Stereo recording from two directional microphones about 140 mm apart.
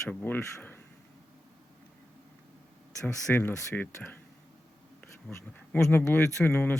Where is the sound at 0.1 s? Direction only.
10° left (ahead or behind).